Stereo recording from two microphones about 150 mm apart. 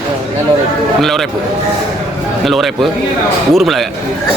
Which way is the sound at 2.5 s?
Centre (ahead or behind).